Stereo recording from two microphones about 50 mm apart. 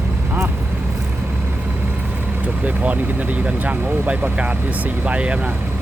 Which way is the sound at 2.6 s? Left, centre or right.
Right.